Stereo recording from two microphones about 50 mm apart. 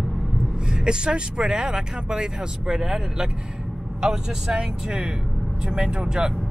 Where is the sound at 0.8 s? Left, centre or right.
Centre.